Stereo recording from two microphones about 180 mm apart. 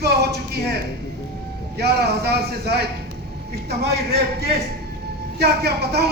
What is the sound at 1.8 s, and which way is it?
A man's voice, 65° right (ahead or behind).